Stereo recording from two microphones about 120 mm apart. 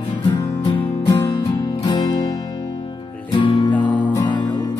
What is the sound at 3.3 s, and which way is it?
Music, 45° left (ahead or behind).